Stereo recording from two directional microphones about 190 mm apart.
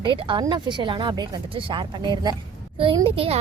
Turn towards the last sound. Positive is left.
turn(degrees=-30)  # may be behind; listen again after turning